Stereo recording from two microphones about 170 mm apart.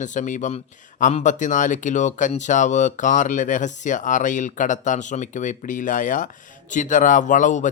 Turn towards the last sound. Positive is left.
turn(degrees=45)  # may be behind; listen again after turning